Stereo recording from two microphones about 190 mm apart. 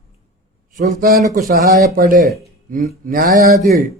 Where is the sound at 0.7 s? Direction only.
50° right (ahead or behind).